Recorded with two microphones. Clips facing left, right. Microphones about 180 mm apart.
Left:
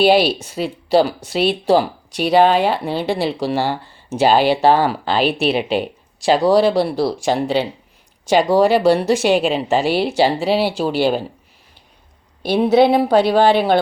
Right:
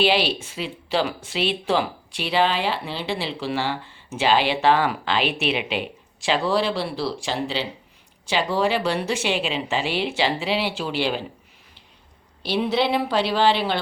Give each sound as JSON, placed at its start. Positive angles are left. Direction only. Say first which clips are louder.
{"t": 0.0, "sound": "speech", "louder": "left 7 dB", "side_deg": 40}
{"t": 12.4, "sound": "speech", "louder": "left 9 dB", "side_deg": 45}